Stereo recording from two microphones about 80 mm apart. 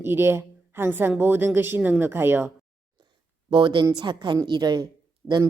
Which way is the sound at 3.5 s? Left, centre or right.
Right.